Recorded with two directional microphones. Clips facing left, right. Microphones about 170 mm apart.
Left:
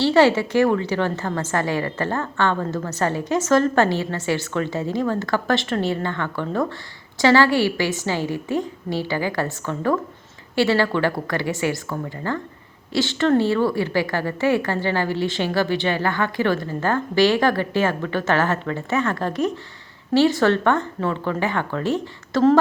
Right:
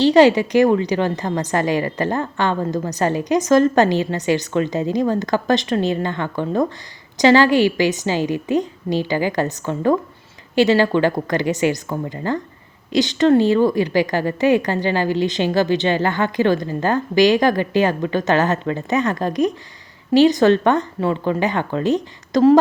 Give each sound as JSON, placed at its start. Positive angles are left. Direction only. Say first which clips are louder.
{"t": 0.0, "sound": "a woman's voice", "louder": "right 4 dB", "side_deg": -15}